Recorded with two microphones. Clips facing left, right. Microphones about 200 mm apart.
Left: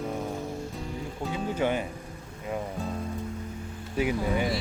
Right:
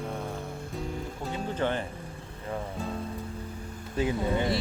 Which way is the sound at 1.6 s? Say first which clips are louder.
Left 2 dB; 10° left (ahead or behind).